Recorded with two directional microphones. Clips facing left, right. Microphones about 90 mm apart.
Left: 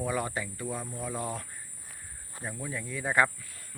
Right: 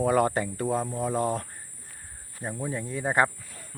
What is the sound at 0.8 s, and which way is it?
Speech, 25° right (ahead or behind).